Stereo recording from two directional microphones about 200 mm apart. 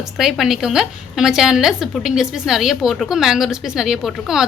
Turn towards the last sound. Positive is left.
turn(degrees=0)  # may be behind; listen again after turning